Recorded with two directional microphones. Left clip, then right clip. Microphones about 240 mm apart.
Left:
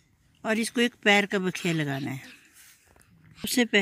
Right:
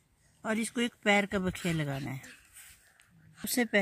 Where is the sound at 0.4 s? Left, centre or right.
Centre.